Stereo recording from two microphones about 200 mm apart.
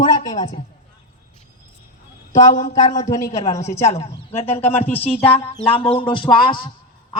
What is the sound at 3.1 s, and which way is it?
Speech, 15° left (ahead or behind).